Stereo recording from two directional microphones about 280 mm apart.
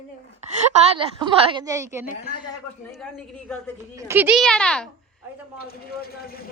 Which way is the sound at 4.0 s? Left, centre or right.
Centre.